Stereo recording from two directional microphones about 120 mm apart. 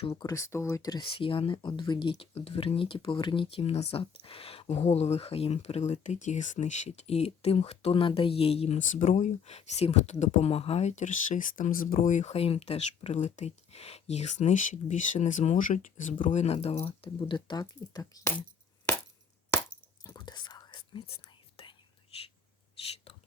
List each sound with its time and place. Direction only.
0.2 s speech: 25° left (ahead or behind)
1.0 s speech: 45° left (ahead or behind); by 18.3 s 25° left (ahead or behind)
20.1 s whispering: 35° left (ahead or behind)